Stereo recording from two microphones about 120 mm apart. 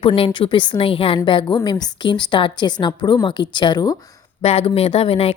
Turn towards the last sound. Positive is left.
turn(degrees=55)  # may be behind; listen again after turning